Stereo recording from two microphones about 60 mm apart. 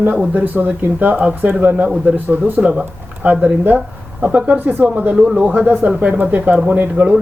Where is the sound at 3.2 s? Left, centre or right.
Right.